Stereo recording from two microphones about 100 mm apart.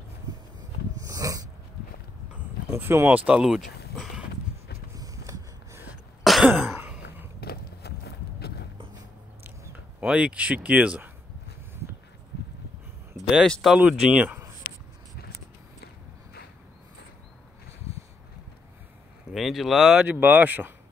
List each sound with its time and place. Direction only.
0.9 s dog: 35° right (ahead or behind)
2.7 s speech: 25° right (ahead or behind)
3.4 s a sound: centre (ahead or behind)
4.9 s a sound: 35° right (ahead or behind)
6.2 s throat clearing: centre (ahead or behind)
9.4 s a sound: 20° right (ahead or behind)
10.0 s speech: 10° right (ahead or behind)
13.5 s speech: centre (ahead or behind)
13.7 s speech: 15° right (ahead or behind)
19.3 s speech: centre (ahead or behind)
20.2 s speech: 20° right (ahead or behind)